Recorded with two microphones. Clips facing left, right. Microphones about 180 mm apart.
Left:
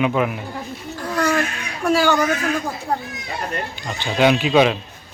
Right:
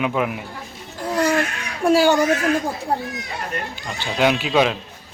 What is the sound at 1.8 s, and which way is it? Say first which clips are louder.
Speech: right 2 dB; 30° right (ahead or behind).